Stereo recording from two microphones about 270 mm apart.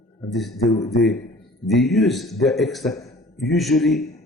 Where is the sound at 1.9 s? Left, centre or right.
Centre.